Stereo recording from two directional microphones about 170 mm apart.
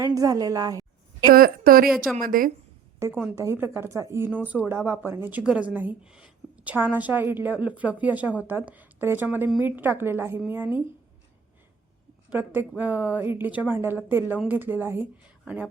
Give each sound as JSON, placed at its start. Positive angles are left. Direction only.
{"t": 0.0, "sound": "a woman's voice", "side_deg": -20}
{"t": 1.3, "sound": "a woman's voice", "side_deg": -60}
{"t": 3.3, "sound": "speech", "side_deg": -15}
{"t": 12.3, "sound": "speech", "side_deg": -10}